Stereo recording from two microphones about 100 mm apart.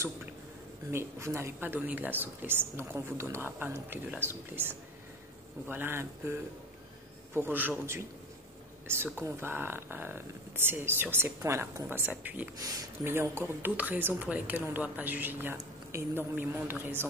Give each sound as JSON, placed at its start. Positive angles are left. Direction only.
{"t": 0.9, "sound": "speech", "side_deg": -25}
{"t": 7.3, "sound": "speech", "side_deg": -20}